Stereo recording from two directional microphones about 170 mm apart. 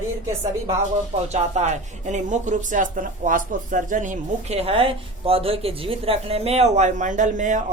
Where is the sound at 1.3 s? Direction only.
45° right (ahead or behind).